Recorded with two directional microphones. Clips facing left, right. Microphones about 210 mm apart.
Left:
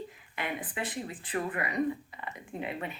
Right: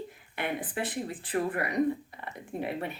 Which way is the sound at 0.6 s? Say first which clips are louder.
Right 3 dB; 35° right (ahead or behind).